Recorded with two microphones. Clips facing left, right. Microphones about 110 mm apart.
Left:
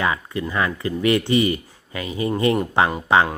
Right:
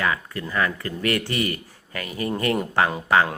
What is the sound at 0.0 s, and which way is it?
A man's voice, 20° left (ahead or behind).